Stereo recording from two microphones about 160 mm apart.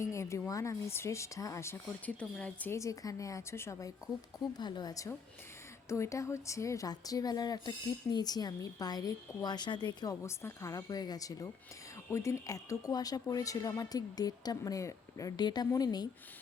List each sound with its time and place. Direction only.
0.0 s speech: 20° left (ahead or behind)